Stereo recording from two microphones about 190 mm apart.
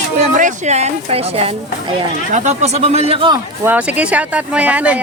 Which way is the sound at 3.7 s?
5° right (ahead or behind).